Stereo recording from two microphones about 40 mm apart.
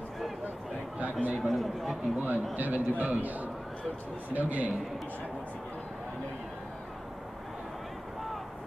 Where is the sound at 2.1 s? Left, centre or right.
Right.